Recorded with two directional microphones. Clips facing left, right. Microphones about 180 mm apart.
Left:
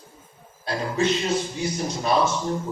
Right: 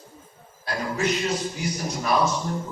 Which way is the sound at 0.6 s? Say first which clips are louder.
Left 2 dB; 25° left (ahead or behind).